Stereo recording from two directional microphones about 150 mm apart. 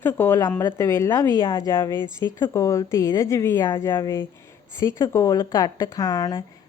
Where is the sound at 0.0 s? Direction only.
15° left (ahead or behind).